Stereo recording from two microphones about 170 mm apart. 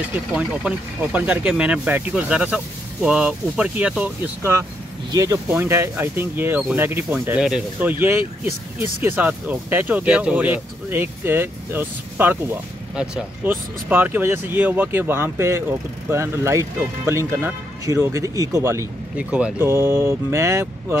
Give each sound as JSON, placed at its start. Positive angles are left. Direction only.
{"t": 0.3, "sound": "speech", "side_deg": -5}
{"t": 5.1, "sound": "speech", "side_deg": -20}